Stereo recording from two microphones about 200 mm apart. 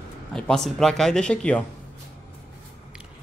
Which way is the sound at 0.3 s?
5° left (ahead or behind).